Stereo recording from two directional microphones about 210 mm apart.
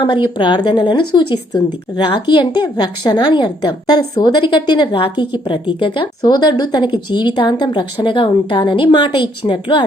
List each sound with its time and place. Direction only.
0.0 s a woman's voice: 25° left (ahead or behind)